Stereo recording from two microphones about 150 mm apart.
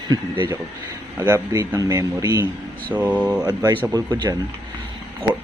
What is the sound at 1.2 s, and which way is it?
Speech, 20° right (ahead or behind).